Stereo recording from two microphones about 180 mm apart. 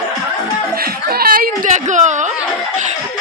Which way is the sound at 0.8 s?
55° right (ahead or behind).